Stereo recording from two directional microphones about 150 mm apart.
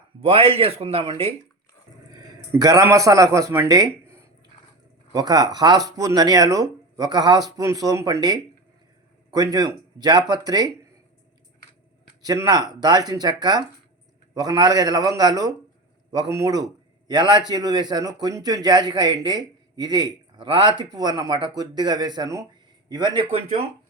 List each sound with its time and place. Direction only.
0.2 s speech: 40° right (ahead or behind)
2.5 s speech: 25° right (ahead or behind)
12.2 s speech: 25° right (ahead or behind)